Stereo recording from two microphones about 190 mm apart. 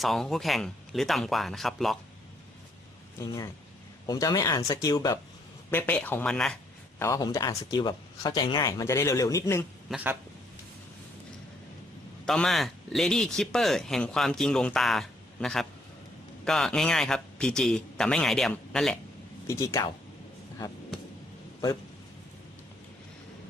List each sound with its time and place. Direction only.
0.0 s speech: centre (ahead or behind)
3.2 s speech: 15° left (ahead or behind)
7.0 s speech: 20° left (ahead or behind)
9.9 s speech: 10° right (ahead or behind)
12.2 s speech: 5° left (ahead or behind)
19.5 s speech: 15° left (ahead or behind)